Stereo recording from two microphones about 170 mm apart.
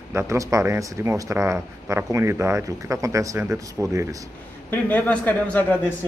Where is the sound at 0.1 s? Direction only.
15° right (ahead or behind).